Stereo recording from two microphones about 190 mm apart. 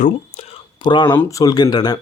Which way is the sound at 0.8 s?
25° left (ahead or behind).